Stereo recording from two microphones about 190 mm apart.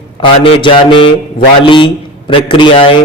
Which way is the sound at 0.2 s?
30° left (ahead or behind).